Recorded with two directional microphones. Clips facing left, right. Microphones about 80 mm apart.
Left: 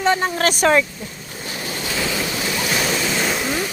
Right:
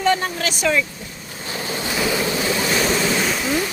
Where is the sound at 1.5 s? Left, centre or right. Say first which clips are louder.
Right 2 dB; right.